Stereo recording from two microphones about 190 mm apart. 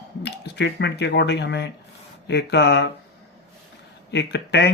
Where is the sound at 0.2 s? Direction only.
65° left (ahead or behind).